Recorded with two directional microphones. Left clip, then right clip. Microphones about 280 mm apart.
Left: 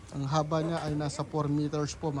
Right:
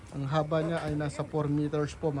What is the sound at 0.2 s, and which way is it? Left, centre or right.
A man's voice, centre.